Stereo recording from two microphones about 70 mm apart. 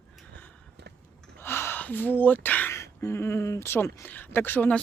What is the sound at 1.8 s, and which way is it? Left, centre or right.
Speech, left.